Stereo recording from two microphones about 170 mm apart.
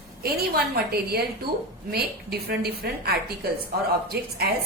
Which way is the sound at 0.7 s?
65° right (ahead or behind).